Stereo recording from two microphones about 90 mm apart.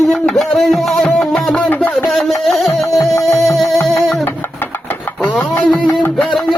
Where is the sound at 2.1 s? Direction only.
Centre (ahead or behind).